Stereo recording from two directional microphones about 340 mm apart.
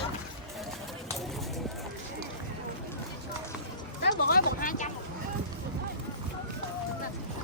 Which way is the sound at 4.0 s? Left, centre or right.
Left.